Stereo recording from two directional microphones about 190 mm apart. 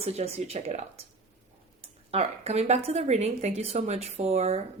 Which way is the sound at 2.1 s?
30° right (ahead or behind).